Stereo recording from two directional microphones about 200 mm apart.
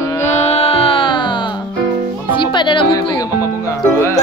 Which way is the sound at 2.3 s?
25° left (ahead or behind).